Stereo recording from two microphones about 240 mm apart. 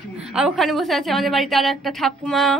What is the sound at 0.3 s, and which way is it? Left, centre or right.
A woman's voice, centre.